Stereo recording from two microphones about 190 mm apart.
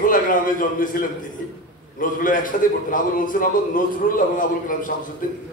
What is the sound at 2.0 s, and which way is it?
A man's voice, 45° left (ahead or behind).